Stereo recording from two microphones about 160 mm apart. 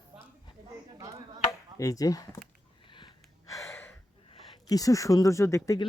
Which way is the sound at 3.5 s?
15° left (ahead or behind).